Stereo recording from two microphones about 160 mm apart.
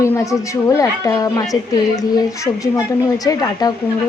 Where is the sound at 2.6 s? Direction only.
20° left (ahead or behind).